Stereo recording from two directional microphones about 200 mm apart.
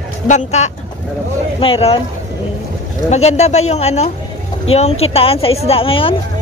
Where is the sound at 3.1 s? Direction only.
35° left (ahead or behind).